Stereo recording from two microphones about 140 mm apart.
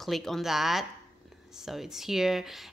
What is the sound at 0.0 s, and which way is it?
A woman's voice, centre (ahead or behind).